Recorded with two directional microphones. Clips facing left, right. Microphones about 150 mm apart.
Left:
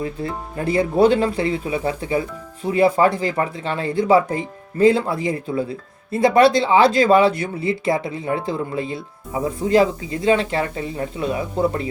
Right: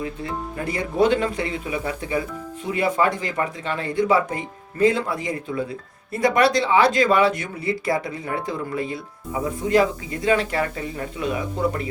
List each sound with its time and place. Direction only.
0.5 s speech: 30° left (ahead or behind)